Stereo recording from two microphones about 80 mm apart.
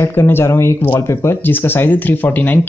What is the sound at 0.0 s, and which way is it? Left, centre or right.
Speech, left.